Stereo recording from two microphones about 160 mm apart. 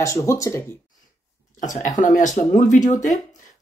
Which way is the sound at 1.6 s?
50° left (ahead or behind).